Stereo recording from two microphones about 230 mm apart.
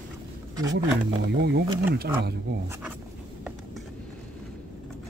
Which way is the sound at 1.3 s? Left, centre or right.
Right.